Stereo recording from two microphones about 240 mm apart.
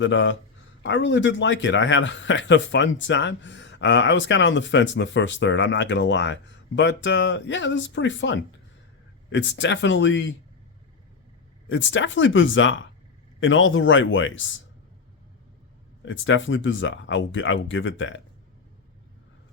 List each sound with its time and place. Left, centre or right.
0.0 s a man's voice: left
11.7 s a man's voice: left
16.0 s a man's voice: left